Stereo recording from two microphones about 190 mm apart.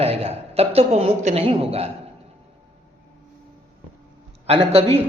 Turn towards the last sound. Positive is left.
turn(degrees=-30)  # may be behind; listen again after turning